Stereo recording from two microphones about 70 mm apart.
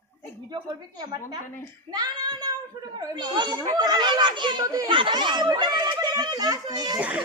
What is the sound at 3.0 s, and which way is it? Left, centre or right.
A woman's voice, right.